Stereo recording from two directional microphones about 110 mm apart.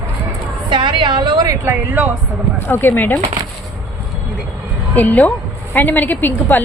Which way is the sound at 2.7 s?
20° left (ahead or behind).